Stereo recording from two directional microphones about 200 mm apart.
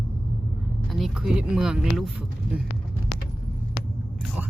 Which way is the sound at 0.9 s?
Centre (ahead or behind).